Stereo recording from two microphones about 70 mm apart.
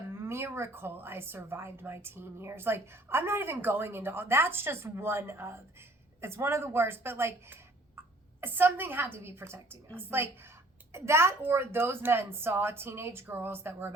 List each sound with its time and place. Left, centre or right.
0.1 s speech: right